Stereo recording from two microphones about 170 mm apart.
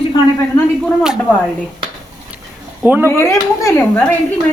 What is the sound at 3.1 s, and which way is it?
Speech, 15° left (ahead or behind).